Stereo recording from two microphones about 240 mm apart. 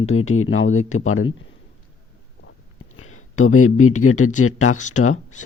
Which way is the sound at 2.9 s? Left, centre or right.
Left.